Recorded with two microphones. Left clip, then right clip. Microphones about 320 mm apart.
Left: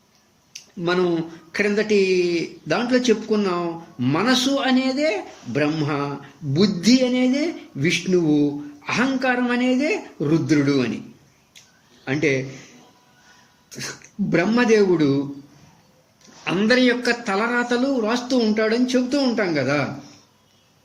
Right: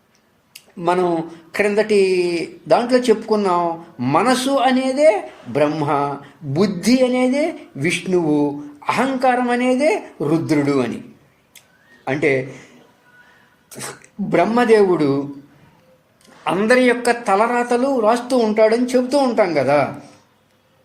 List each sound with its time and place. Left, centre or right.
1.1 s speech: centre
12.0 s speech: centre
14.3 s speech: centre
16.4 s speech: centre